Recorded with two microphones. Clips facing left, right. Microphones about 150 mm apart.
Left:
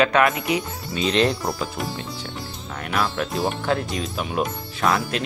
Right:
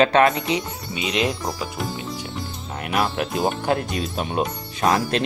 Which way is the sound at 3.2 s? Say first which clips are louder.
Right 2 dB; 20° right (ahead or behind).